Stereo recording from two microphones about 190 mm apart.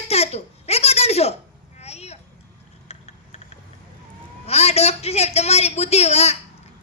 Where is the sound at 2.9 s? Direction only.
35° left (ahead or behind).